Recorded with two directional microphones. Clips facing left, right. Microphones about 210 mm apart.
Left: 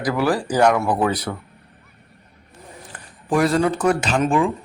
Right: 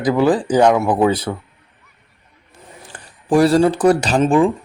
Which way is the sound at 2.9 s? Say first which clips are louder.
Right 5 dB; 30° right (ahead or behind).